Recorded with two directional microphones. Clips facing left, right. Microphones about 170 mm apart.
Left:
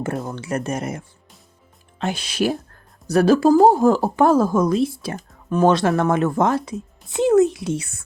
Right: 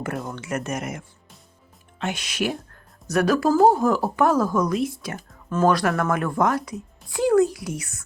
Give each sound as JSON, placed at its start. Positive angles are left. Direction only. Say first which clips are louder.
{"t": 0.0, "sound": "speech", "louder": "left 4 dB", "side_deg": 25}
{"t": 5.1, "sound": "speech", "louder": "left 4 dB", "side_deg": 20}